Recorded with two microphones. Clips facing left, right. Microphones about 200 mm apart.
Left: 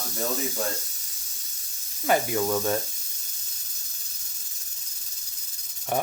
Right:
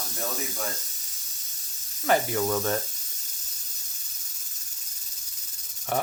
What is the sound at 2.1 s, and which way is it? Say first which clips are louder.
Speech: even; 15° left (ahead or behind).